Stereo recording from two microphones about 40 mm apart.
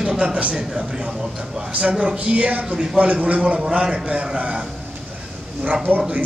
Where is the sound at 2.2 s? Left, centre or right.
Right.